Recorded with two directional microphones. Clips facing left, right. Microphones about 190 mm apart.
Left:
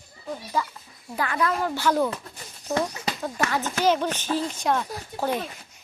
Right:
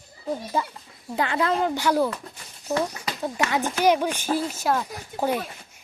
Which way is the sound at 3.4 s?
15° right (ahead or behind).